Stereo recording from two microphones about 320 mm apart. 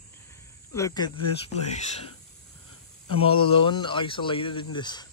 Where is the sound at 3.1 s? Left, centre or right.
Centre.